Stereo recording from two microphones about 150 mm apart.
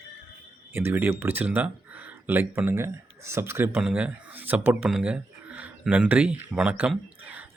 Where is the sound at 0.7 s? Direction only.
15° right (ahead or behind).